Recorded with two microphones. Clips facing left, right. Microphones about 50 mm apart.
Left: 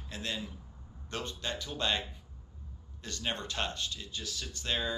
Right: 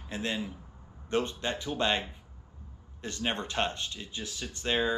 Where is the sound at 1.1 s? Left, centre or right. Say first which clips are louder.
Right 7 dB; right.